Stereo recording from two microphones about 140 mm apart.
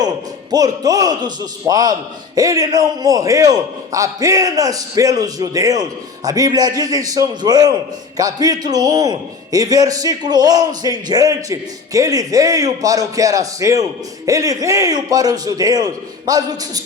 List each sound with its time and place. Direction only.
0.5 s a man's voice: 25° right (ahead or behind)